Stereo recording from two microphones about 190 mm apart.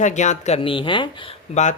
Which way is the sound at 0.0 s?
40° left (ahead or behind).